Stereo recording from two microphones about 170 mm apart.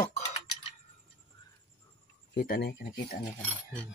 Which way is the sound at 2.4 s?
65° left (ahead or behind).